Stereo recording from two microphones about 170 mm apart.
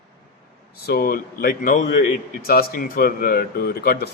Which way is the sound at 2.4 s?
60° left (ahead or behind).